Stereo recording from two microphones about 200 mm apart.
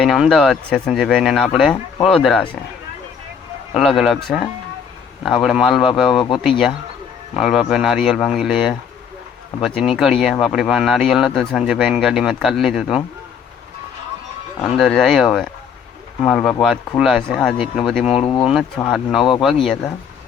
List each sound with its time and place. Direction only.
0.0 s speech: centre (ahead or behind)
3.8 s speech: centre (ahead or behind)
5.2 s speech: centre (ahead or behind)
6.1 s speech: 25° left (ahead or behind)
7.3 s speech: centre (ahead or behind)
14.6 s speech: 5° left (ahead or behind)
18.1 s speech: 30° left (ahead or behind)
18.5 s speech: centre (ahead or behind)